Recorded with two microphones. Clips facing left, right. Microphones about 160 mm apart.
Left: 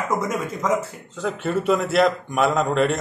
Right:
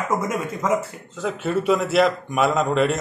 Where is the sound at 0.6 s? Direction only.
5° right (ahead or behind).